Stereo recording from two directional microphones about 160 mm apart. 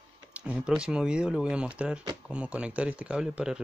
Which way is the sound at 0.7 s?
5° right (ahead or behind).